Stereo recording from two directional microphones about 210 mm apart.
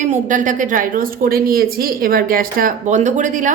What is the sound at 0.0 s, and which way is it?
A woman's voice, 35° right (ahead or behind).